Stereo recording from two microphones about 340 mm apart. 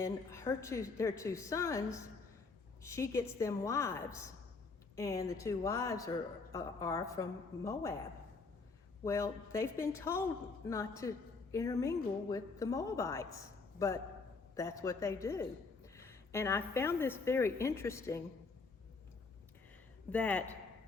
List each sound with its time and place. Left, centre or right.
0.0 s a woman's voice: centre
9.0 s a woman's voice: centre
20.1 s speech: centre